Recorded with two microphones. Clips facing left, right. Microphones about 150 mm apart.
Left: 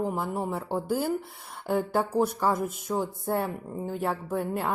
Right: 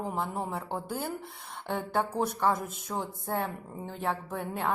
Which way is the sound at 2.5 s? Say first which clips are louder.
Left 6 dB; 55° left (ahead or behind).